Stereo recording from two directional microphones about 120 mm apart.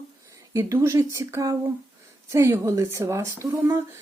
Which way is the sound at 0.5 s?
25° right (ahead or behind).